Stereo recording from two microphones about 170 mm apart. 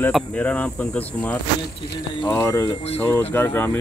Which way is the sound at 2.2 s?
20° left (ahead or behind).